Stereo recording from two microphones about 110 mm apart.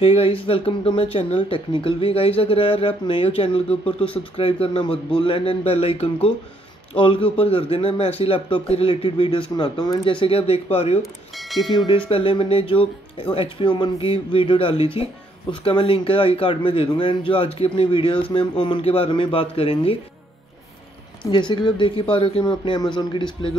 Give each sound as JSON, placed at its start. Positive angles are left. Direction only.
{"t": 0.0, "sound": "speech", "side_deg": 60}
{"t": 11.0, "sound": "speech", "side_deg": 0}
{"t": 11.7, "sound": "speech", "side_deg": 45}
{"t": 21.3, "sound": "speech", "side_deg": 45}